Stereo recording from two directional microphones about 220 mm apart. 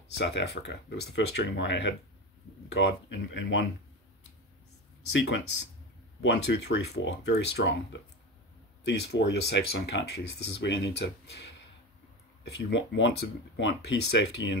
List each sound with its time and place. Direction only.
0.1 s speech: 50° left (ahead or behind)
6.2 s speech: 50° left (ahead or behind)
12.5 s speech: 50° left (ahead or behind)